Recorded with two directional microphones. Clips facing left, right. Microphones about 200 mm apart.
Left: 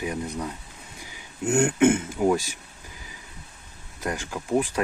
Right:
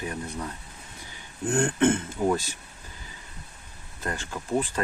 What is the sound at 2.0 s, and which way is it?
Speech, 10° left (ahead or behind).